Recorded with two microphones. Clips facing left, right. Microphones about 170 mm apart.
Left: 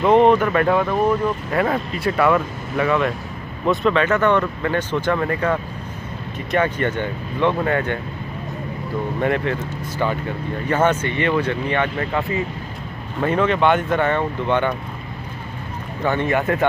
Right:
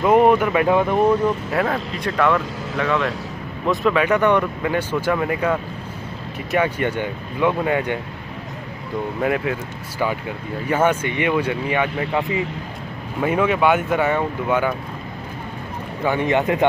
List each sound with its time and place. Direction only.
0.0 s speech: 10° right (ahead or behind)
1.5 s speech: centre (ahead or behind)
9.2 s speech: 5° right (ahead or behind)
16.0 s speech: 10° right (ahead or behind)